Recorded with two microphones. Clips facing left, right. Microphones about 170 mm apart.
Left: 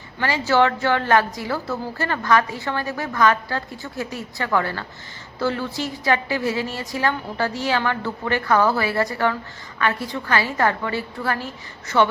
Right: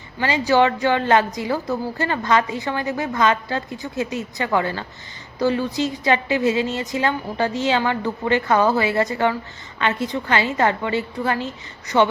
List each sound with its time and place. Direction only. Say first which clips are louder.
0.2 s a woman's voice: right 2 dB; 15° right (ahead or behind)